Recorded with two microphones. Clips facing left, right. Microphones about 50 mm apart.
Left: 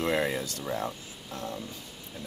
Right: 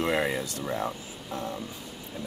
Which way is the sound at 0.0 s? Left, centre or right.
Centre.